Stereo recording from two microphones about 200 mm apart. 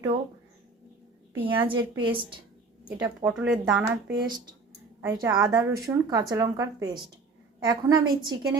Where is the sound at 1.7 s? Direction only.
25° right (ahead or behind).